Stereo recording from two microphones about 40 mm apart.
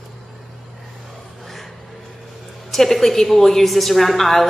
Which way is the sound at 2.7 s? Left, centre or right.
Centre.